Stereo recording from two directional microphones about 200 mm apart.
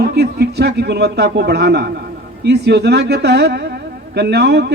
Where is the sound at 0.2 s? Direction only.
55° right (ahead or behind).